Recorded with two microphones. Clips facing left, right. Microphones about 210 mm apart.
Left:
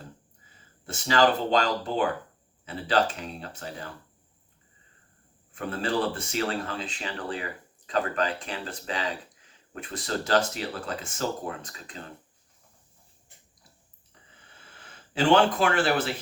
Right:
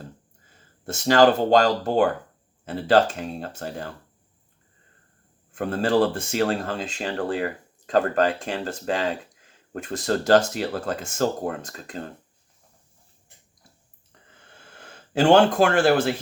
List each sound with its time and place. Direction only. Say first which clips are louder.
1.1 s speech: right 6 dB; 45° right (ahead or behind)
5.8 s speech: right 7 dB; 45° right (ahead or behind)
14.8 s speech: right 6 dB; 45° right (ahead or behind)